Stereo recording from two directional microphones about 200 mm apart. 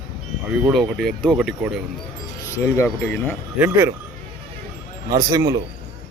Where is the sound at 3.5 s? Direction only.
10° right (ahead or behind).